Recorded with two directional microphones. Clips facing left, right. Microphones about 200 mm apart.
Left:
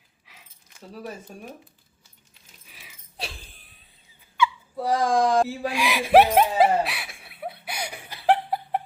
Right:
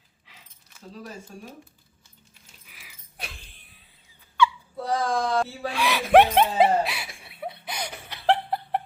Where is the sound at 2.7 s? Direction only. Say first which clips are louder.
Left 3 dB; 25° left (ahead or behind).